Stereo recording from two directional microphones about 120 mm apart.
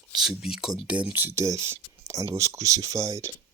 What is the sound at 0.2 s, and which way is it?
Speech, 5° right (ahead or behind).